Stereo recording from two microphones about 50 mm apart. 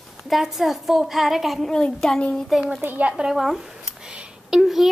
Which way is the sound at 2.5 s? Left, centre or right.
Centre.